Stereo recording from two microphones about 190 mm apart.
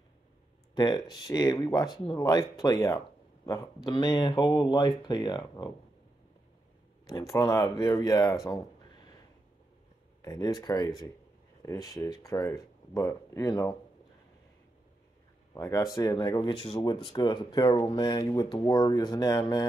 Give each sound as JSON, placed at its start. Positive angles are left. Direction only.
{"t": 0.7, "sound": "speech", "side_deg": 25}
{"t": 7.1, "sound": "speech", "side_deg": 15}
{"t": 10.2, "sound": "speech", "side_deg": 20}
{"t": 15.5, "sound": "speech", "side_deg": 20}